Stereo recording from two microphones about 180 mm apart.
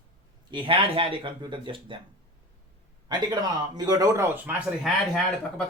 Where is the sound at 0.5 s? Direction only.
30° right (ahead or behind).